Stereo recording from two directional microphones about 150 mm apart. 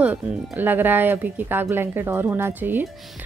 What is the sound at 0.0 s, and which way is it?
A woman's voice, 10° right (ahead or behind).